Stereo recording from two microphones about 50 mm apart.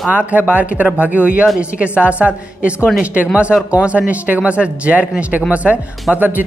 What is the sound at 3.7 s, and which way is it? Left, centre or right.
Speech, right.